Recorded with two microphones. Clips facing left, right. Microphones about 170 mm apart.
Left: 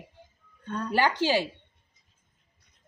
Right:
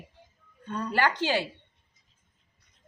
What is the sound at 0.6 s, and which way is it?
Speech, 5° right (ahead or behind).